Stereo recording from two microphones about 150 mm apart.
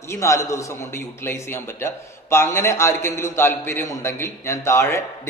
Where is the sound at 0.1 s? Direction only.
20° left (ahead or behind).